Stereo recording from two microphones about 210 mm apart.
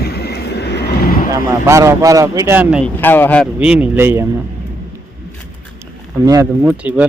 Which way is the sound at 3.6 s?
5° right (ahead or behind).